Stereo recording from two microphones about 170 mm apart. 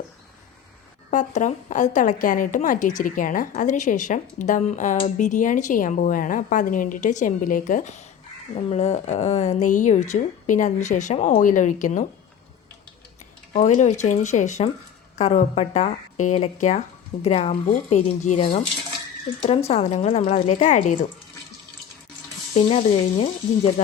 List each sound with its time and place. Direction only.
1.1 s a woman's voice: 45° left (ahead or behind)
13.5 s a woman's voice: 45° left (ahead or behind)
22.5 s speech: 35° left (ahead or behind)